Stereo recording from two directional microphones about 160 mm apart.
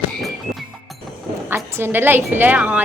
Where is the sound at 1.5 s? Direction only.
15° right (ahead or behind).